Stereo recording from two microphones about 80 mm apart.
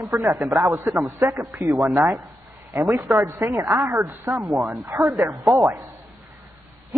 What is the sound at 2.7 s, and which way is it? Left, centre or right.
A woman's voice, right.